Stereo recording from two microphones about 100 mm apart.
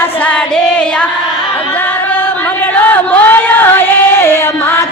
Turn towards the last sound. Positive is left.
turn(degrees=25)  # may be behind; listen again after turning